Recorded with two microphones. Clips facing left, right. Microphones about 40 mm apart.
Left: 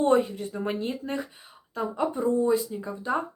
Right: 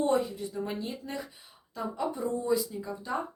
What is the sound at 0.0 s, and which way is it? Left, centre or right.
Speech, left.